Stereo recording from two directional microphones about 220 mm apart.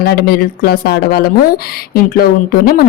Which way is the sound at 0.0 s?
45° left (ahead or behind).